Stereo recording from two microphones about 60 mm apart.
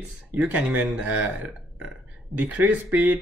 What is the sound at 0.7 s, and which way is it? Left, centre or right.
Speech, right.